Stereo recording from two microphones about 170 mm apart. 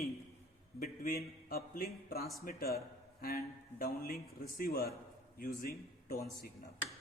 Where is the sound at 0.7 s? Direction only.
55° left (ahead or behind).